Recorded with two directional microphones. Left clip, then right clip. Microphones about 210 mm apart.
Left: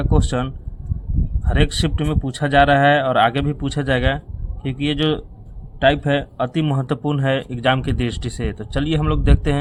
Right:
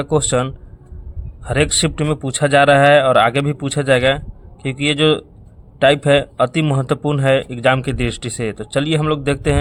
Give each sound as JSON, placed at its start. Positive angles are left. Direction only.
{"t": 0.0, "sound": "speech", "side_deg": -20}